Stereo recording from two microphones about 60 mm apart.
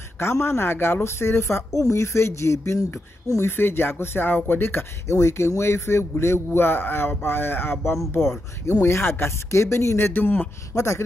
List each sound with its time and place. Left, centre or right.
0.2 s a man's voice: left
3.4 s speech: left
5.0 s a man's voice: left
10.7 s a man's voice: left